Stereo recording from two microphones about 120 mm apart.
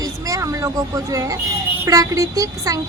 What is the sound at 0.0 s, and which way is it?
Vehicle, 25° right (ahead or behind).